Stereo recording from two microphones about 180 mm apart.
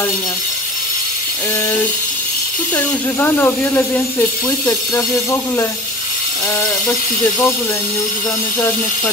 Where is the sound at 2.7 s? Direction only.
10° left (ahead or behind).